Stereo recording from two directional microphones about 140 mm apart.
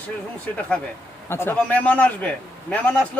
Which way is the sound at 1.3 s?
15° left (ahead or behind).